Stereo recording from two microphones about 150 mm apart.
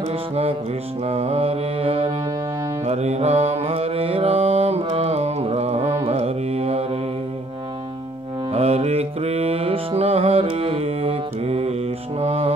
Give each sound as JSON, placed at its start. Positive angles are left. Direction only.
{"t": 1.0, "sound": "mantra", "side_deg": -45}
{"t": 4.8, "sound": "carnatic music", "side_deg": -45}
{"t": 6.0, "sound": "music", "side_deg": -45}
{"t": 8.5, "sound": "music", "side_deg": -45}
{"t": 12.2, "sound": "mantra", "side_deg": -45}